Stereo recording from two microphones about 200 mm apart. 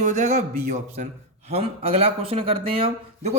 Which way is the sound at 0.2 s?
35° right (ahead or behind).